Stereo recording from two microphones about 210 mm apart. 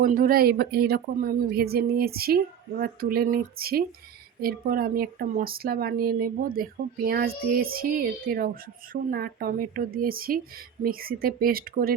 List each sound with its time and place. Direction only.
0.0 s speech: 40° right (ahead or behind)